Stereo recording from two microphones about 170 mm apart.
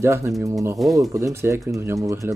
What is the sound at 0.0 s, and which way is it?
Speech, 15° right (ahead or behind).